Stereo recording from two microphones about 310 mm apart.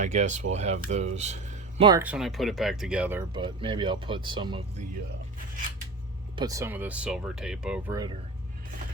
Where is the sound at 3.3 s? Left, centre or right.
Centre.